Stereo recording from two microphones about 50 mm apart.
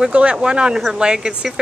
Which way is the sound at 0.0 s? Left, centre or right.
Right.